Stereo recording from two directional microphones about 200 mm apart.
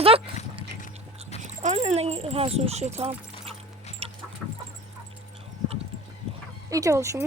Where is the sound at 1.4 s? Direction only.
35° right (ahead or behind).